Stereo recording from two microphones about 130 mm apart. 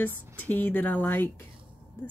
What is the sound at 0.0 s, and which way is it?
Speech, 15° left (ahead or behind).